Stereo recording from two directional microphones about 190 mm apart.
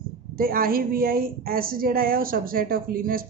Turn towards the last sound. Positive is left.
turn(degrees=-50)  # may be behind; listen again after turning